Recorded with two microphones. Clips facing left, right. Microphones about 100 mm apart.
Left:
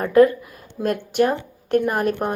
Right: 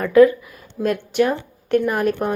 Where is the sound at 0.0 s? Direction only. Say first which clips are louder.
Right 2 dB; 40° left (ahead or behind).